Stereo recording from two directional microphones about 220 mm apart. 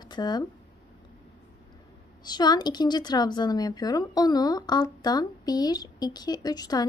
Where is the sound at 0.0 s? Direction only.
20° left (ahead or behind).